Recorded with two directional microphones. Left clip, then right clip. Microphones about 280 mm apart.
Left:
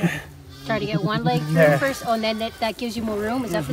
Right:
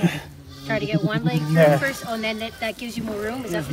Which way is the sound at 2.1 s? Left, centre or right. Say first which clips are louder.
Left 4 dB; centre.